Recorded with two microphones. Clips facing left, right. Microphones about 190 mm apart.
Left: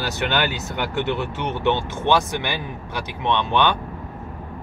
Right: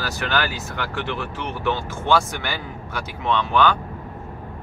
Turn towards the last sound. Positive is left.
turn(degrees=20)  # may be behind; listen again after turning